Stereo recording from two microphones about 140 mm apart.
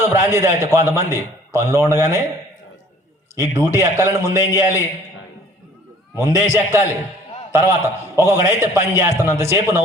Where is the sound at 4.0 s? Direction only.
20° right (ahead or behind).